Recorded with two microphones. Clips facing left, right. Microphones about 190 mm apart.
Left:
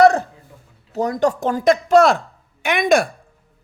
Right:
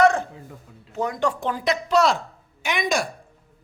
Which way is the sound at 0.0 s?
35° left (ahead or behind).